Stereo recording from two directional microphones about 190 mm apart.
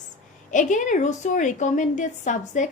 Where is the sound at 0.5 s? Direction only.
40° left (ahead or behind).